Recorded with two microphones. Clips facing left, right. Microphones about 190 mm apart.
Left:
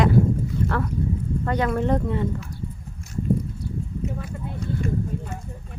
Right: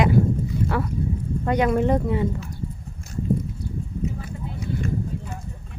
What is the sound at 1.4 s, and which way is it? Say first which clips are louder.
Speech: right 3 dB; 15° right (ahead or behind).